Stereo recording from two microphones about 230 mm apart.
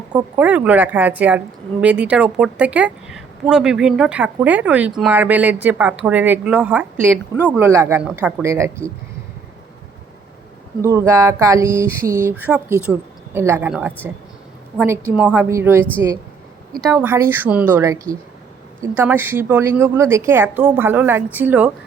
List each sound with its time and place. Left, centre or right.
0.1 s a woman's voice: centre
0.4 s a woman's voice: centre
10.8 s a woman's voice: centre
15.1 s a woman's voice: centre
16.7 s a woman's voice: centre
17.0 s a woman's voice: centre